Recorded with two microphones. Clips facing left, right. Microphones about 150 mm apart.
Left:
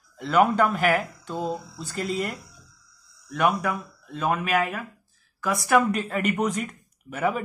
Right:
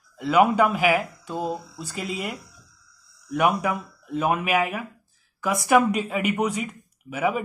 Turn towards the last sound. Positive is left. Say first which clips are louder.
# right 1 dB
turn(degrees=-5)  # may be behind; listen again after turning